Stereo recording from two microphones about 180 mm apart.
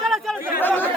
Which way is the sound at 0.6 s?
10° left (ahead or behind).